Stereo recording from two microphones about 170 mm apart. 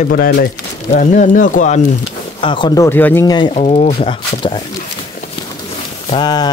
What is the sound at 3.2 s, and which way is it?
Speech, 25° left (ahead or behind).